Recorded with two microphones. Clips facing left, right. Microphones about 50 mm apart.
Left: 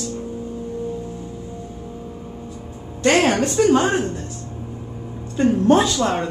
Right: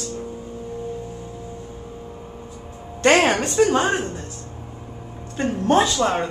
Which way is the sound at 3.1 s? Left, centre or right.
Right.